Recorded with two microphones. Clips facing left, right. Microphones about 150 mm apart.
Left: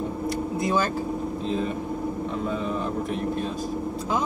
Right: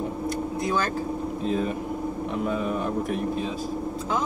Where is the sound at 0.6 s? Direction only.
5° left (ahead or behind).